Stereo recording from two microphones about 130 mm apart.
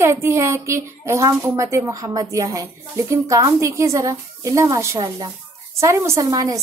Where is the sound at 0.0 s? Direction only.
20° right (ahead or behind).